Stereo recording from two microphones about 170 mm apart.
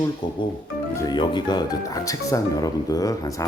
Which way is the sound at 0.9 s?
25° left (ahead or behind).